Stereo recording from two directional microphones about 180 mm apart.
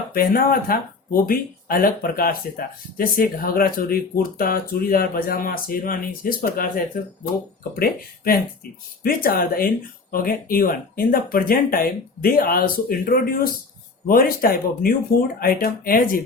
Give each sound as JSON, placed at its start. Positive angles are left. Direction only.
{"t": 0.1, "sound": "speech", "side_deg": 55}